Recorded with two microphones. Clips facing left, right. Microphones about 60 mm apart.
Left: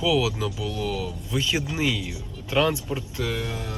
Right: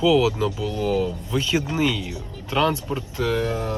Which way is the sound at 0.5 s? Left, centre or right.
Right.